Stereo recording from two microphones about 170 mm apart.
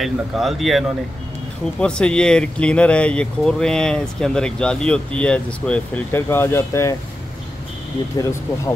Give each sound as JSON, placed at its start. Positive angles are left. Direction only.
{"t": 0.0, "sound": "speech", "side_deg": 0}
{"t": 8.2, "sound": "speech", "side_deg": 20}